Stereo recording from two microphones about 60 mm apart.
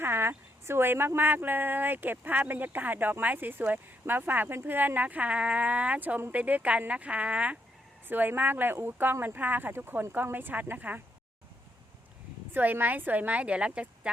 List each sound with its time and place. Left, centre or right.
0.0 s a woman's voice: right
8.0 s a woman's voice: right
12.5 s a woman's voice: right